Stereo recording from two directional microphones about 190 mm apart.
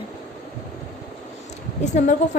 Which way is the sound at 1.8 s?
40° left (ahead or behind).